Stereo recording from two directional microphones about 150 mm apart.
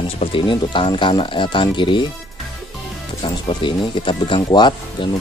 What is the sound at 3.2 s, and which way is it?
Speech, 30° left (ahead or behind).